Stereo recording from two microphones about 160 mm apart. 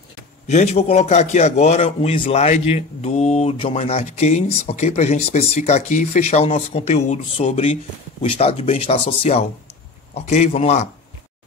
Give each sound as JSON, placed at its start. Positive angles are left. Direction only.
{"t": 0.5, "sound": "a man's voice", "side_deg": 45}